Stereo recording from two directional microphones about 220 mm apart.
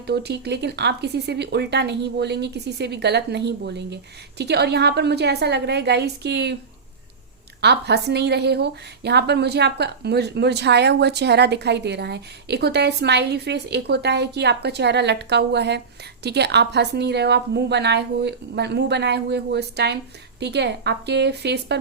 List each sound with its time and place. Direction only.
0.1 s a woman's voice: 50° right (ahead or behind)
7.6 s a woman's voice: 50° right (ahead or behind)